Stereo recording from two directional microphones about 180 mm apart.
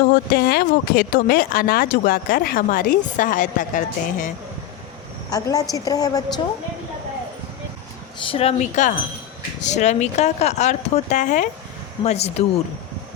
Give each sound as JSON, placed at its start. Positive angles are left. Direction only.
{"t": 0.1, "sound": "speech", "side_deg": 55}
{"t": 5.3, "sound": "a woman's voice", "side_deg": 20}
{"t": 8.3, "sound": "speech", "side_deg": 35}